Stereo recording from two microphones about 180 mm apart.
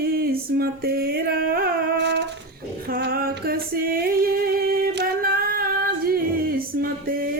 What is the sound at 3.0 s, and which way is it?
Music, 55° right (ahead or behind).